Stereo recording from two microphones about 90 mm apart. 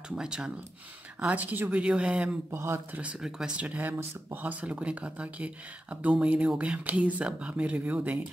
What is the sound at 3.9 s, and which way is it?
Speech, 30° right (ahead or behind).